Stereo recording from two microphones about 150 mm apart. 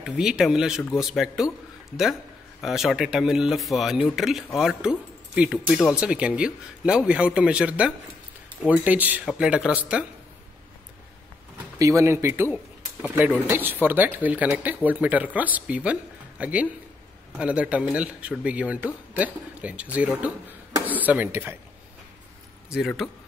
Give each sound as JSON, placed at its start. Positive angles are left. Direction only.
{"t": 0.0, "sound": "speech", "side_deg": -5}
{"t": 11.8, "sound": "speech", "side_deg": -20}
{"t": 22.7, "sound": "speech", "side_deg": 0}